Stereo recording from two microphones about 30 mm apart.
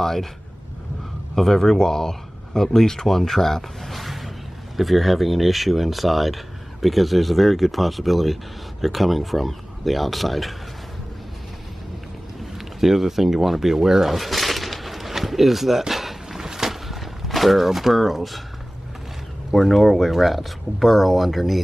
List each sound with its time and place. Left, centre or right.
0.0 s speech: centre
1.3 s speech: centre
12.4 s speech: centre
13.7 s a sound: centre
16.3 s boat: centre
16.8 s a sound: centre
17.9 s speech: centre
19.5 s speech: centre